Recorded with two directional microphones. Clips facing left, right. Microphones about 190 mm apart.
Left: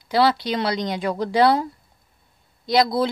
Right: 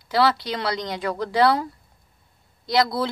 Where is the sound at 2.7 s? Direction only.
15° left (ahead or behind).